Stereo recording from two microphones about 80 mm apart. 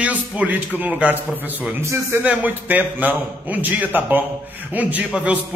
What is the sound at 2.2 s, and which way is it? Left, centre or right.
A man's voice, right.